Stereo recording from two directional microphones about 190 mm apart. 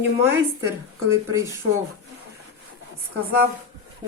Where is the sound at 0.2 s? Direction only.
15° right (ahead or behind).